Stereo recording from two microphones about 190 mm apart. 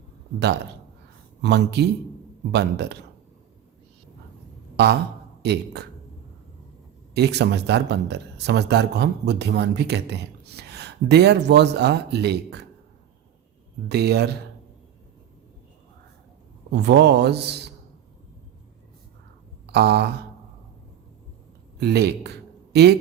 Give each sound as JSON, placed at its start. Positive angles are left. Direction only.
{"t": 1.4, "sound": "a man's voice", "side_deg": -65}
{"t": 4.8, "sound": "a man's voice", "side_deg": -60}
{"t": 7.1, "sound": "a man's voice", "side_deg": -60}
{"t": 13.8, "sound": "a man's voice", "side_deg": -60}
{"t": 16.7, "sound": "a man's voice", "side_deg": -60}
{"t": 19.6, "sound": "a sound", "side_deg": -60}
{"t": 21.8, "sound": "a man's voice", "side_deg": -60}